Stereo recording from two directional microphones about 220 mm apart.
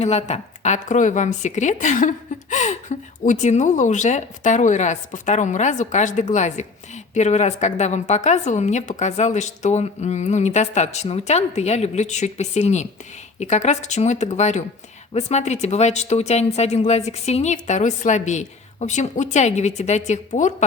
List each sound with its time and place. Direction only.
0.0 s a woman's voice: 30° left (ahead or behind)